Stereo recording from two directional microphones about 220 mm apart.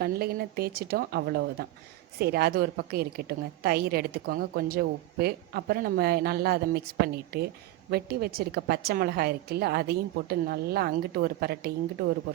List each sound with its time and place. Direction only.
0.0 s a woman's voice: 45° right (ahead or behind)